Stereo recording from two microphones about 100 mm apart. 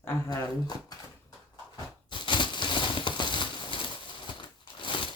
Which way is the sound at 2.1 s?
55° left (ahead or behind).